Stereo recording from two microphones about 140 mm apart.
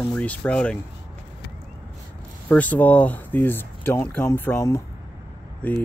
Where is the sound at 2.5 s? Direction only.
10° left (ahead or behind).